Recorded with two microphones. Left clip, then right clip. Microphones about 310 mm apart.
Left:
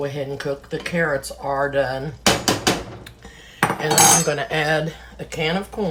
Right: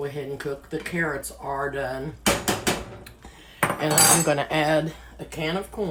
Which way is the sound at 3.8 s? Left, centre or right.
Centre.